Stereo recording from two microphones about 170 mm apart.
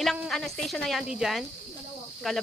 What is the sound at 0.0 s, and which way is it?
Speech, centre (ahead or behind).